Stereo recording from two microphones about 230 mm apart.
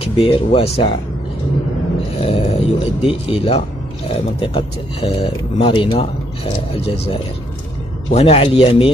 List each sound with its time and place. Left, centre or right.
0.2 s speech: left
2.1 s speech: left